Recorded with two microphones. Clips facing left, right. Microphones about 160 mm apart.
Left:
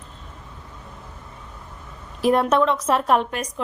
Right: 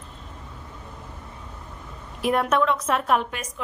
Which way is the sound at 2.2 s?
30° left (ahead or behind).